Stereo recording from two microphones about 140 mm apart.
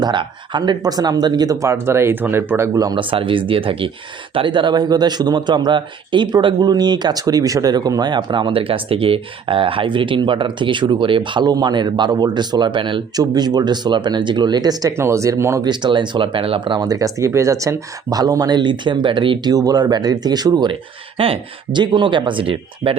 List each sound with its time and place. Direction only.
0.0 s a man's voice: 35° right (ahead or behind)
15.7 s a man's voice: 35° right (ahead or behind)